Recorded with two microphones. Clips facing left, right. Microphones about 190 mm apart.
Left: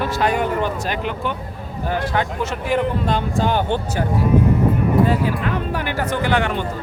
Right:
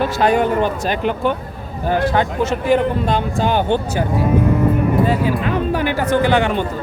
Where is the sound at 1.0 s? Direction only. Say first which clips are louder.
Right 6 dB; 40° right (ahead or behind).